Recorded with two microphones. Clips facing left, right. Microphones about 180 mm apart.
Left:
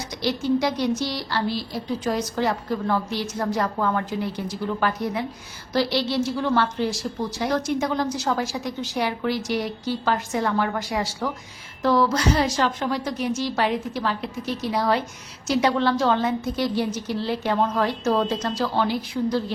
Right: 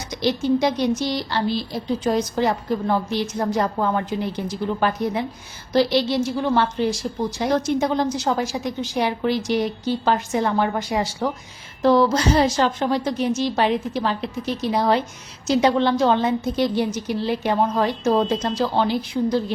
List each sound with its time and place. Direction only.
0.1 s a woman's voice: 20° right (ahead or behind)